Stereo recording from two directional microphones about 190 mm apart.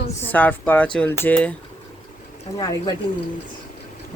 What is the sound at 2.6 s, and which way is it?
Speech, 20° left (ahead or behind).